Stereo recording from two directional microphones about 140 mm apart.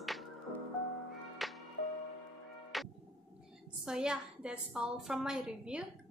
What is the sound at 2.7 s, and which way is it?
Music, centre (ahead or behind).